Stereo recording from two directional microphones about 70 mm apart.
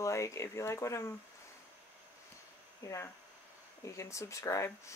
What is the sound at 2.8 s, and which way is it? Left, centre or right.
Speech, left.